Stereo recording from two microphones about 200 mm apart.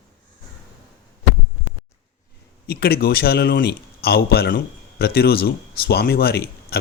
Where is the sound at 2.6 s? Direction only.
50° left (ahead or behind).